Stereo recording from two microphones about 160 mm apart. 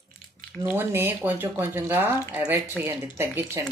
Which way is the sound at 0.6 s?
15° right (ahead or behind).